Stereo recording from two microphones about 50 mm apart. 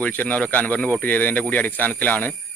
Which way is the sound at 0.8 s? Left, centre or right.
Centre.